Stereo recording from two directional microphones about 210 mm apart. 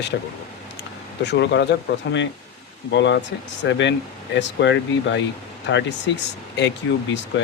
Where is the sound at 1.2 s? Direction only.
55° left (ahead or behind).